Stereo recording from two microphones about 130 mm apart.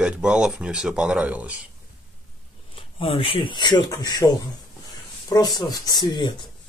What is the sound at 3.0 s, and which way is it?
Speech, 45° left (ahead or behind).